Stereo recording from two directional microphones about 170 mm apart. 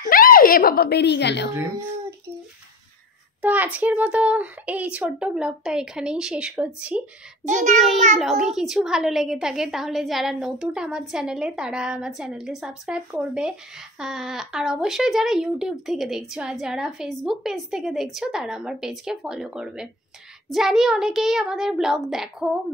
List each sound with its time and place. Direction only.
0.1 s speech: 55° left (ahead or behind); by 1.5 s 85° left
3.4 s speech: 10° right (ahead or behind)
7.4 s a child's voice: 45° right (ahead or behind)
7.7 s a woman's voice: centre (ahead or behind)